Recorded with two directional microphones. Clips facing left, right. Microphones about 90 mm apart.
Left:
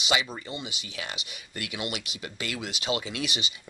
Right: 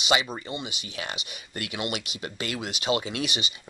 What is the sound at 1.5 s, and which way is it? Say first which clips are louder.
Speech: right 3 dB; 40° right (ahead or behind).